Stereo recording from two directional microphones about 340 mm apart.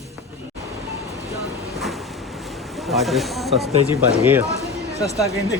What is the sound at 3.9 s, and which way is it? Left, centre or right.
Speech, centre.